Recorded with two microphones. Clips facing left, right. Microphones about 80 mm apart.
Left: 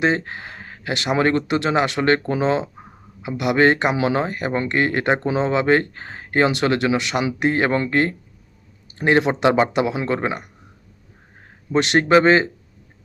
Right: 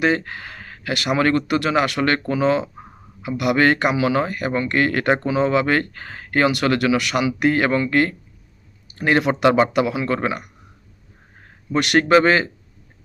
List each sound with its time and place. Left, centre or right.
0.0 s speech: left
11.7 s speech: left